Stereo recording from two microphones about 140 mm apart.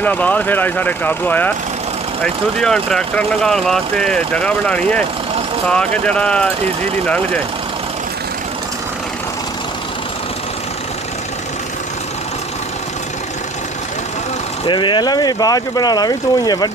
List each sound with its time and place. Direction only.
0.0 s speech: 10° left (ahead or behind)
14.7 s speech: 35° left (ahead or behind)